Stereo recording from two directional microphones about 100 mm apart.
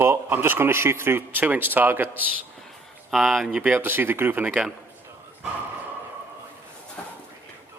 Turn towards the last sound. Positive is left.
turn(degrees=15)  # may be behind; listen again after turning